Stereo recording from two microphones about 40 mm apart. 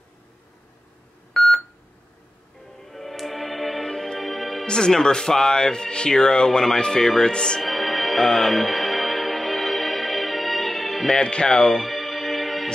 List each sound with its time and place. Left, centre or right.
1.3 s telephone dialing: centre
2.8 s music: centre
4.6 s speech: centre
7.6 s music: centre
11.1 s music: left; by 12.6 s centre